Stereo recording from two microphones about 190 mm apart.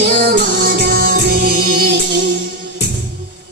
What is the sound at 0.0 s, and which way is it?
Music, 55° right (ahead or behind).